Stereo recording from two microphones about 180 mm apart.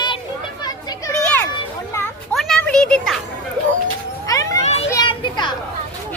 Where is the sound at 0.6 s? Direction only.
20° left (ahead or behind).